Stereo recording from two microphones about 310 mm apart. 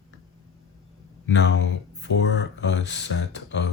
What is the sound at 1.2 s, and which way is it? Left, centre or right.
Speech, left.